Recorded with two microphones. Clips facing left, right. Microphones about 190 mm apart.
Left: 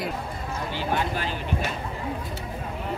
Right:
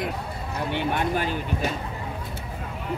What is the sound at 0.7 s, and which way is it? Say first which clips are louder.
Speech: right 3 dB; 60° right (ahead or behind).